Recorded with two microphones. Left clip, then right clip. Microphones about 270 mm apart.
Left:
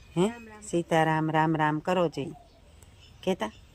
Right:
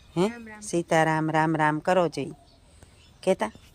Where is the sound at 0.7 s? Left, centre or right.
Centre.